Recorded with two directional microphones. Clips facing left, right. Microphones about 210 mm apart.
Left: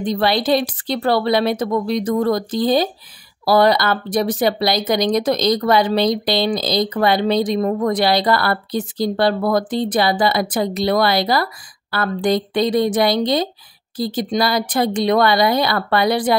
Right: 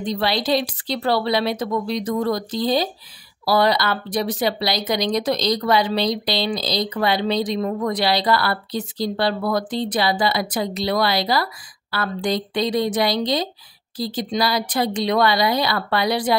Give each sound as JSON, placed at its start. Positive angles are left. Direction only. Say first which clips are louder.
{"t": 0.0, "sound": "speech", "louder": "left 4 dB", "side_deg": 50}